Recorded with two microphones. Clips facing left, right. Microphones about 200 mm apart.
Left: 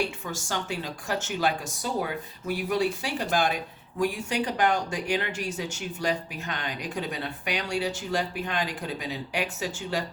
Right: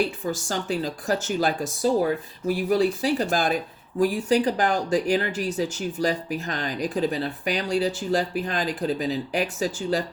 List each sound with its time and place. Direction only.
0.3 s speech: 35° right (ahead or behind)